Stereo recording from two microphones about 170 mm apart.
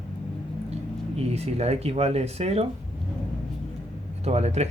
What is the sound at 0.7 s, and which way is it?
Speech, 35° right (ahead or behind).